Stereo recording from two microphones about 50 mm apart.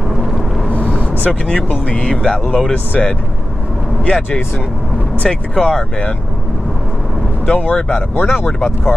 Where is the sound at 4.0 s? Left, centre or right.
Left.